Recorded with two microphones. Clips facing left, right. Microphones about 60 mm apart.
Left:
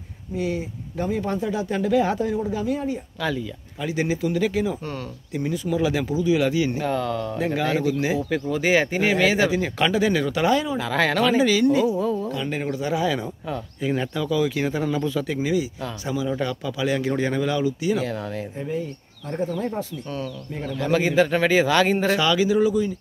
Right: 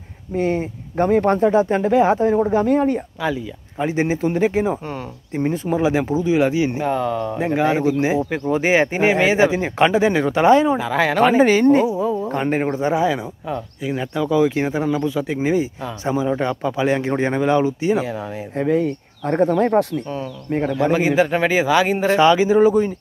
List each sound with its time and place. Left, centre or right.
0.3 s speech: right
2.3 s speech: right
3.8 s speech: right
10.8 s a man's voice: centre
11.1 s speech: right
11.9 s a sound: centre
12.3 s speech: right
13.5 s a man's voice: centre
14.1 s speech: right
18.6 s speech: right
20.7 s a man's voice: centre
22.1 s speech: right